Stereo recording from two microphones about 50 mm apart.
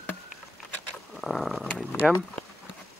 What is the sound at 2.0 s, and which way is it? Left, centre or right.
Speech, centre.